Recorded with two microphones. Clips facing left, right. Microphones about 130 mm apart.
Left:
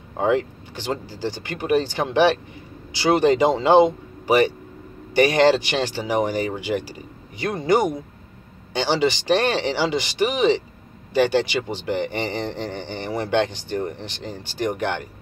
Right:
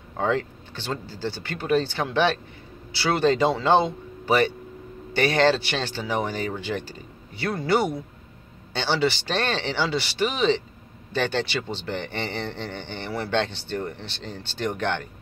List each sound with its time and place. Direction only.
0.2 s speech: 15° left (ahead or behind)